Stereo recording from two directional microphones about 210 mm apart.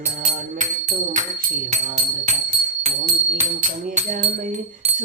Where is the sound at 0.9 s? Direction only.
40° right (ahead or behind).